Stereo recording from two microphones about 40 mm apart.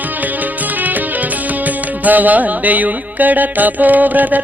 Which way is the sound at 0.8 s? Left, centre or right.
Right.